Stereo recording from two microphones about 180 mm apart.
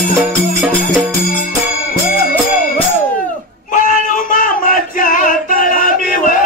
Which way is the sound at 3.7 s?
50° left (ahead or behind).